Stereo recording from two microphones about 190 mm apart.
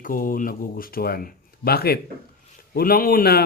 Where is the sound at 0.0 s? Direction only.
45° left (ahead or behind).